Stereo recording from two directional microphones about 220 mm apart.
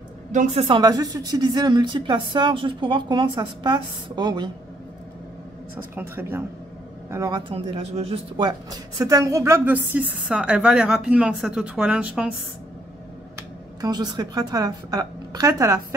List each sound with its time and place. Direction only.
0.3 s speech: 35° right (ahead or behind)
5.9 s speech: 10° right (ahead or behind)
13.4 s speech: 15° right (ahead or behind)